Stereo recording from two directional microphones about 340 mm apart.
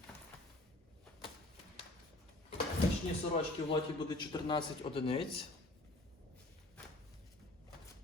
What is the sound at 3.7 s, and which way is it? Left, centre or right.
A man's voice, centre.